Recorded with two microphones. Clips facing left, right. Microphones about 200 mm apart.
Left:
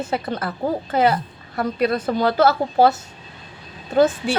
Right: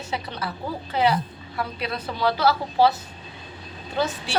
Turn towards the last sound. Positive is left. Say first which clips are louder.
# left 10 dB
turn(degrees=50)  # may be behind; listen again after turning